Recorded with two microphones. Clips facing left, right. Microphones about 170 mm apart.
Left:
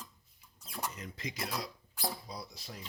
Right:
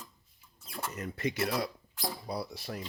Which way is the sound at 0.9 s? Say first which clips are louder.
Right 9 dB; 60° right (ahead or behind).